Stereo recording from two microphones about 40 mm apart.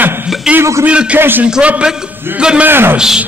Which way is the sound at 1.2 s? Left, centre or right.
Right.